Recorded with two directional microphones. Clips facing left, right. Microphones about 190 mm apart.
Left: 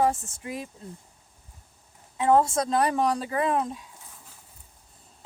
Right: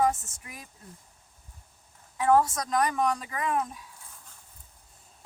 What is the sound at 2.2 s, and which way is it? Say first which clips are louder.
Speech: left 2 dB; 25° left (ahead or behind).